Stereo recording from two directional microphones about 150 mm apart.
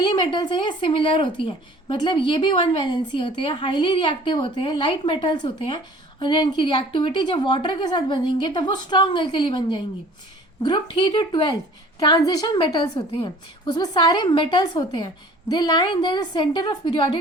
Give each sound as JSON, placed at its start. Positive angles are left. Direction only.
{"t": 0.0, "sound": "a woman's voice", "side_deg": 30}